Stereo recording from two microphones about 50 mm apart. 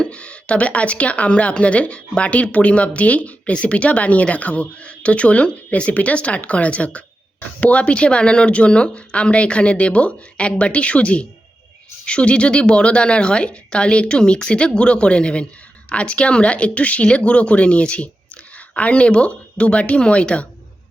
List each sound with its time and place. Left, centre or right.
0.0 s speech: left